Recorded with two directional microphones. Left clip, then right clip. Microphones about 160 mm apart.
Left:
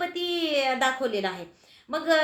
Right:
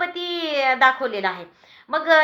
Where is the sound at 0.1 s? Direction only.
40° left (ahead or behind).